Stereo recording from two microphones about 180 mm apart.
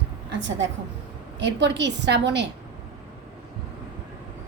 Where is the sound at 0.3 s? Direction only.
80° right.